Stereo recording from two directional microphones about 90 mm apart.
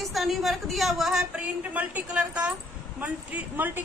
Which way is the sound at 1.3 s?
15° right (ahead or behind).